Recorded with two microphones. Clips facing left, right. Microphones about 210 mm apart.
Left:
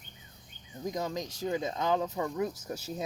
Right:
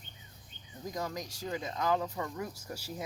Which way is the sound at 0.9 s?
20° left (ahead or behind).